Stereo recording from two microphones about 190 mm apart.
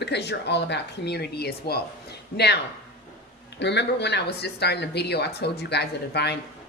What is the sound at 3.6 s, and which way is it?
Speech, 65° left (ahead or behind).